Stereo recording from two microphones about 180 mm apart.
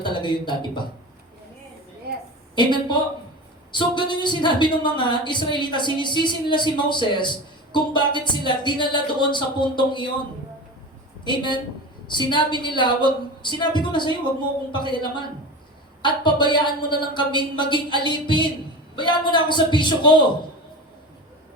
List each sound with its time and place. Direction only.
0.0 s speech: 25° left (ahead or behind)
2.6 s speech: 25° left (ahead or behind)
11.3 s speech: 25° left (ahead or behind)